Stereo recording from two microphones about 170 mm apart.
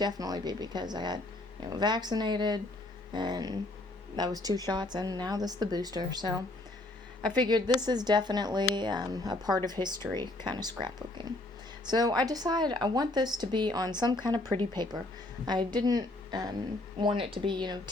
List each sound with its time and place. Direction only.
0.0 s a woman's voice: 20° right (ahead or behind)